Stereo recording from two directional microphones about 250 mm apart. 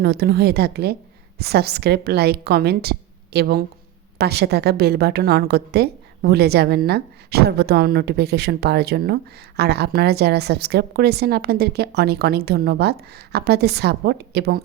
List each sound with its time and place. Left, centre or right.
0.0 s a woman's voice: right